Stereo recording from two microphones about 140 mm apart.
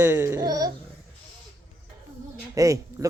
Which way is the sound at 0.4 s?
25° right (ahead or behind).